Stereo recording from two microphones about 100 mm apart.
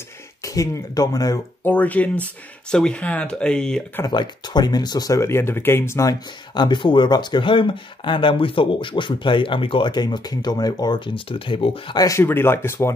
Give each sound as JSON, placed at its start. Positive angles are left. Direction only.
{"t": 0.6, "sound": "speech", "side_deg": 35}
{"t": 1.6, "sound": "speech", "side_deg": 15}
{"t": 4.0, "sound": "speech", "side_deg": 45}
{"t": 5.2, "sound": "speech", "side_deg": 25}
{"t": 6.0, "sound": "speech", "side_deg": 50}
{"t": 11.1, "sound": "speech", "side_deg": 60}
{"t": 12.2, "sound": "speech", "side_deg": 25}